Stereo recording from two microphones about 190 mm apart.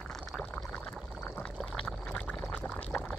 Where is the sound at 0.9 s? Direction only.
Centre (ahead or behind).